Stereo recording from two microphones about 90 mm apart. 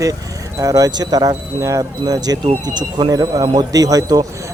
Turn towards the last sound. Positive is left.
turn(degrees=-45)  # may be behind; listen again after turning